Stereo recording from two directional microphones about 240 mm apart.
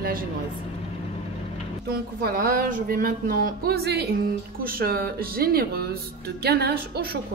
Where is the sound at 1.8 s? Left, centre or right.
Right.